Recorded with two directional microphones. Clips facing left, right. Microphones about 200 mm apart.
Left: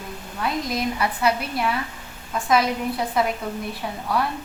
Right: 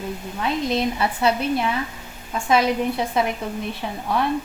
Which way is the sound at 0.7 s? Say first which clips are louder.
Right 3 dB; 25° right (ahead or behind).